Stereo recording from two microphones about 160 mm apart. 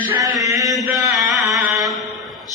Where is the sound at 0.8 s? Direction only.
20° right (ahead or behind).